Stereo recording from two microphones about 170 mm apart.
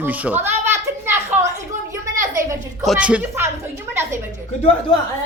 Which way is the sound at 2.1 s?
50° right (ahead or behind).